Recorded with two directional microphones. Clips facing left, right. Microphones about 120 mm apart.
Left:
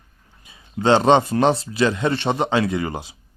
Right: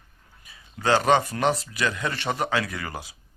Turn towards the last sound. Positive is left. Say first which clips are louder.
# left 10 dB
turn(degrees=25)  # may be behind; listen again after turning